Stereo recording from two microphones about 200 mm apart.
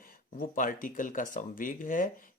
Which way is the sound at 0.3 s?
45° left (ahead or behind).